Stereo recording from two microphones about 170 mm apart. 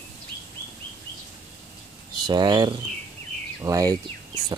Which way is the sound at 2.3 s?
25° right (ahead or behind).